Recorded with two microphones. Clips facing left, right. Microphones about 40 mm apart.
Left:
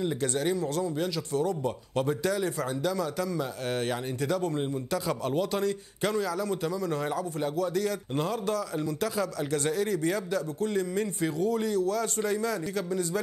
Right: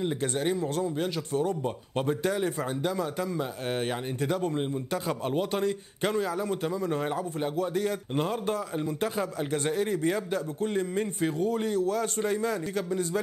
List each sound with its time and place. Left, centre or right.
0.0 s speech: right